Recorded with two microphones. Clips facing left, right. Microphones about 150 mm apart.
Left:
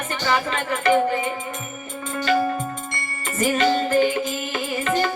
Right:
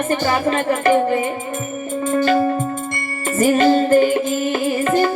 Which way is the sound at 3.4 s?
45° right (ahead or behind).